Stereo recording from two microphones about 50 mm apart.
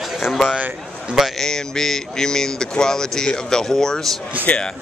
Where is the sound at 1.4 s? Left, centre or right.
Centre.